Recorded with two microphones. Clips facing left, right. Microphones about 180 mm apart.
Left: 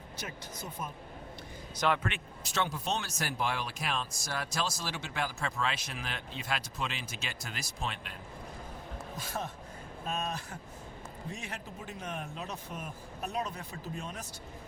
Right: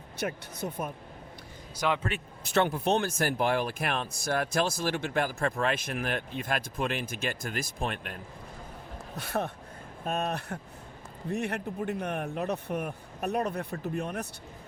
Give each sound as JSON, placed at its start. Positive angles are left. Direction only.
{"t": 0.6, "sound": "a man's voice", "side_deg": -55}
{"t": 1.7, "sound": "a man's voice", "side_deg": -10}
{"t": 2.0, "sound": "a man's voice", "side_deg": -40}
{"t": 2.4, "sound": "speech", "side_deg": -55}
{"t": 9.1, "sound": "a man's voice", "side_deg": -65}